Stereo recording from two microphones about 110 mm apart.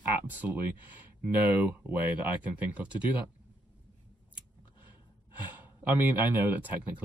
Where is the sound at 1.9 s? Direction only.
15° right (ahead or behind).